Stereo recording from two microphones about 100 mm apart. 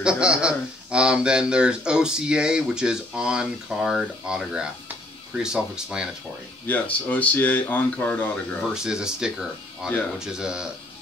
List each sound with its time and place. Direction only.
0.0 s speech: 10° right (ahead or behind)
6.7 s speech: 15° left (ahead or behind)
8.6 s speech: 5° right (ahead or behind)